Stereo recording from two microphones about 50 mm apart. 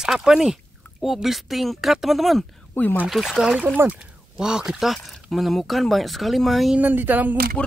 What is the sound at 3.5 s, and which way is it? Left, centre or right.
Speech, right.